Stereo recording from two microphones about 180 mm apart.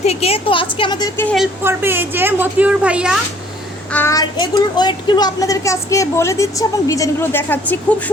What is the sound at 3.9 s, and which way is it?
A child's voice, 15° left (ahead or behind).